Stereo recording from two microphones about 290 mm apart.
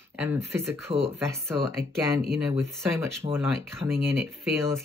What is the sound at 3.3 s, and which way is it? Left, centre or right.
Speech, centre.